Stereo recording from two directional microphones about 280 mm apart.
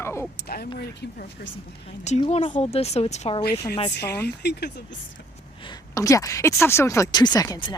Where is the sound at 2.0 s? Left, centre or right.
Left.